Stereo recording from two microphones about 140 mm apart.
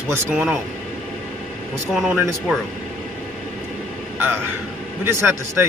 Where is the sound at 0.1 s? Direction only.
10° right (ahead or behind).